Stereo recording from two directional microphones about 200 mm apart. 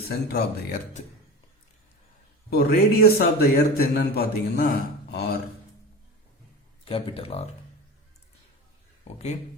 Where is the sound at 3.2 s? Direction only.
50° left (ahead or behind).